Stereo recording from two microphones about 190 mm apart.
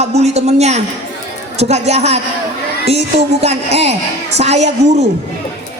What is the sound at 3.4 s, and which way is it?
A woman's voice, 35° right (ahead or behind).